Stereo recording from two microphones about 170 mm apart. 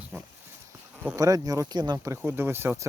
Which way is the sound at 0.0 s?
10° right (ahead or behind).